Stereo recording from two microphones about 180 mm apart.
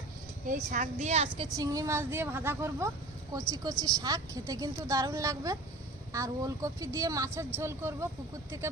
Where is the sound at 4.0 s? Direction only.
20° right (ahead or behind).